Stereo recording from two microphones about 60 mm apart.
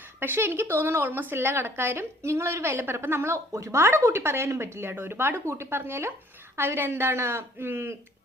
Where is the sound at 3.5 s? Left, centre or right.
Right.